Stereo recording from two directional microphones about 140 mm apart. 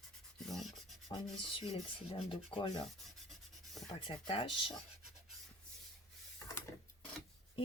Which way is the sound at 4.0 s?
40° left (ahead or behind).